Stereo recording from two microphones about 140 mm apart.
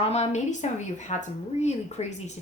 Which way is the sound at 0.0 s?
50° left (ahead or behind).